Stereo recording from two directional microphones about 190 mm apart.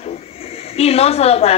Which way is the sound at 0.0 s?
30° left (ahead or behind).